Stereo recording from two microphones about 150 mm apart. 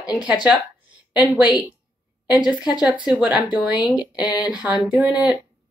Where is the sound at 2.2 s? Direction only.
5° right (ahead or behind).